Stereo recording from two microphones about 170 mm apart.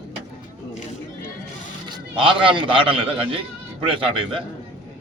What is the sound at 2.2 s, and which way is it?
A man's voice, 30° right (ahead or behind).